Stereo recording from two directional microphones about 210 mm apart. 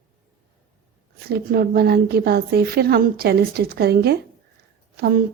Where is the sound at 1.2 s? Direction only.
50° right (ahead or behind).